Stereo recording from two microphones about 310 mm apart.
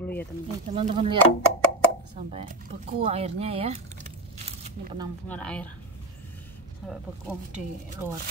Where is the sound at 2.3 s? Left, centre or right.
Centre.